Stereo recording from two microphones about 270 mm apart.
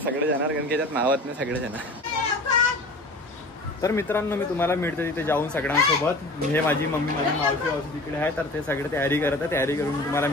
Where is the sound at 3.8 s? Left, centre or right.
Centre.